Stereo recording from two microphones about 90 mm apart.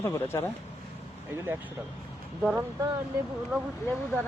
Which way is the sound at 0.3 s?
35° left (ahead or behind).